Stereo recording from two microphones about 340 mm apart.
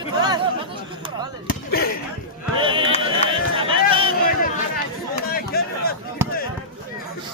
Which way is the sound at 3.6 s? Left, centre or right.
Centre.